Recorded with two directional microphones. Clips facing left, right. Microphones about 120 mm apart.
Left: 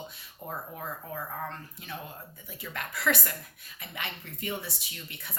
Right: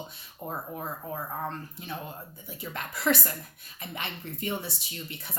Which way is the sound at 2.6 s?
30° right (ahead or behind).